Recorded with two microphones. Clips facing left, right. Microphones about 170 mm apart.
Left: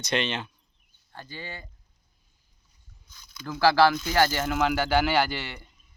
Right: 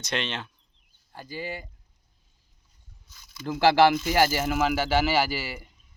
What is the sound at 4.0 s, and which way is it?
Speech, 5° right (ahead or behind).